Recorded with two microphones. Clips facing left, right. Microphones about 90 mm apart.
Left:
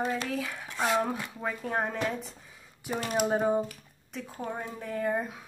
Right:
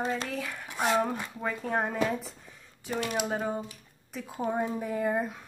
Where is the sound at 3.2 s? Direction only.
15° left (ahead or behind).